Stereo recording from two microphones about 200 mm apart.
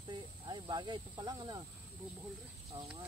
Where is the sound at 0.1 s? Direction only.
20° right (ahead or behind).